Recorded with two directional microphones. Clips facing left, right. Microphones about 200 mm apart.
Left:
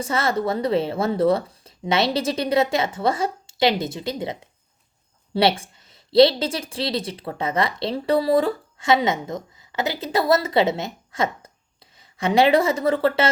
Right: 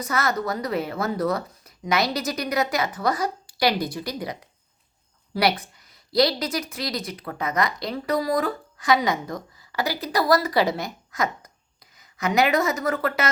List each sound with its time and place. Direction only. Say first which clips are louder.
0.0 s a woman's voice: left 3 dB; 30° left (ahead or behind)